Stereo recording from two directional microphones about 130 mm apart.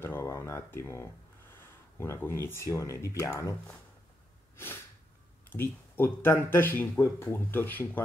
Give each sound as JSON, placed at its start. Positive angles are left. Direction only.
{"t": 0.0, "sound": "a sound", "side_deg": 20}
{"t": 1.5, "sound": "speech", "side_deg": 20}
{"t": 5.5, "sound": "speech", "side_deg": 15}